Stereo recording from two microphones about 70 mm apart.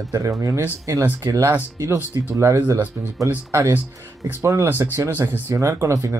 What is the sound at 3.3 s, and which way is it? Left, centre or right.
Speech, right.